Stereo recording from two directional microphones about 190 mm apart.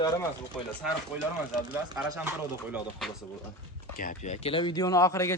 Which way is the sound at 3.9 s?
40° left (ahead or behind).